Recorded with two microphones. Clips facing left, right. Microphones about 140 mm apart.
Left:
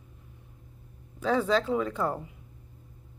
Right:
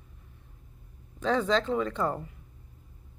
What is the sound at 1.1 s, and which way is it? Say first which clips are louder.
Speech: left 1 dB; 5° left (ahead or behind).